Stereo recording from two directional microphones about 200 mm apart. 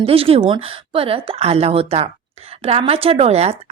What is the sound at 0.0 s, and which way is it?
A woman's voice, 30° right (ahead or behind).